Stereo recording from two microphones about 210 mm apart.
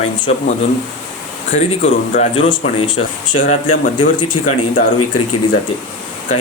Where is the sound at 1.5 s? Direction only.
40° left (ahead or behind).